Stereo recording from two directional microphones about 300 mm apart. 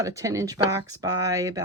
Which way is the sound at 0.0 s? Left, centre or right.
Centre.